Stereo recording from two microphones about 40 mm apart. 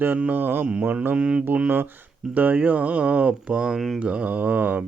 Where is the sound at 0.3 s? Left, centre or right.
Right.